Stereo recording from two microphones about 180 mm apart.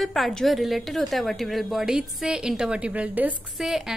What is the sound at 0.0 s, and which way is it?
A woman's voice, centre (ahead or behind).